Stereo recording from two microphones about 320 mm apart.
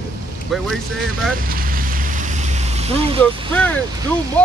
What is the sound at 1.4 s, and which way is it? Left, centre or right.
Vehicle, right.